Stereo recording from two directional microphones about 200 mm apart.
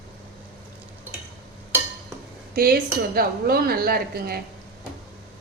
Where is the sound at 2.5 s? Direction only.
45° right (ahead or behind).